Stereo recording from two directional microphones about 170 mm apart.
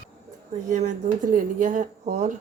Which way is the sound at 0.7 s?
45° right (ahead or behind).